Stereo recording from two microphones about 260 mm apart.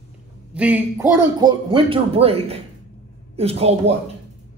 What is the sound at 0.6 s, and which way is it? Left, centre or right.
A man's voice, centre.